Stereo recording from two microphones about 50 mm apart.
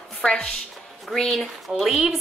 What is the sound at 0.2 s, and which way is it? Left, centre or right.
Speech, centre.